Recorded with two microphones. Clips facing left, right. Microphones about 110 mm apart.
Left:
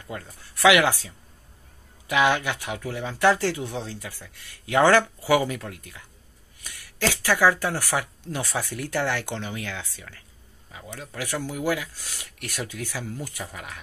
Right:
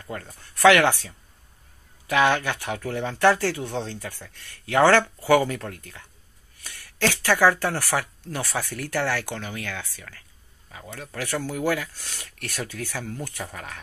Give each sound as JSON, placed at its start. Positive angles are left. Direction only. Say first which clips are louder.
{"t": 0.0, "sound": "speech", "louder": "right 1 dB", "side_deg": 15}